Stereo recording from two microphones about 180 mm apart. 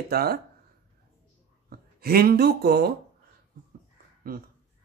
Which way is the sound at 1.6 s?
60° right (ahead or behind).